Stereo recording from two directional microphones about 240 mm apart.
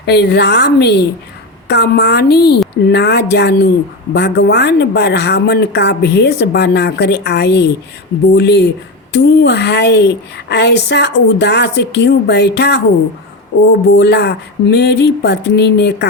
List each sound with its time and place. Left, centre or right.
0.0 s a woman's voice: left
13.9 s a woman's voice: left